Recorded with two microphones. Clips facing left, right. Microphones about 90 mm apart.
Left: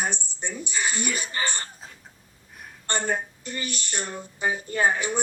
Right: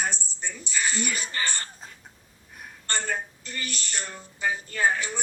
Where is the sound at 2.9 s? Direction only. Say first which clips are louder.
Left 3 dB; 20° left (ahead or behind).